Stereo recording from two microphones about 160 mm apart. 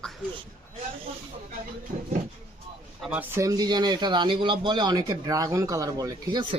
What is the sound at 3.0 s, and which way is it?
Speech, 10° right (ahead or behind).